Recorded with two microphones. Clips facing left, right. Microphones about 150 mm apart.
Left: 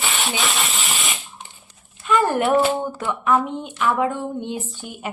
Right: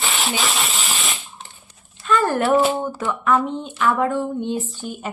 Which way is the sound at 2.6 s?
5° right (ahead or behind).